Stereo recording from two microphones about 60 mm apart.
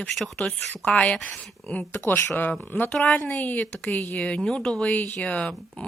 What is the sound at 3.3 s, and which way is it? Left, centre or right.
Speech, left.